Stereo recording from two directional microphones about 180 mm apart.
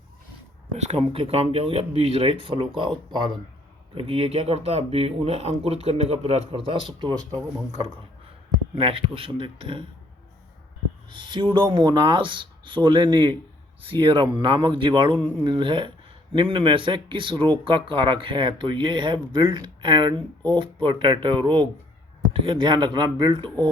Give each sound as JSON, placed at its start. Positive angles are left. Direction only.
{"t": 0.8, "sound": "speech", "side_deg": -35}
{"t": 8.7, "sound": "speech", "side_deg": -30}
{"t": 11.1, "sound": "speech", "side_deg": -25}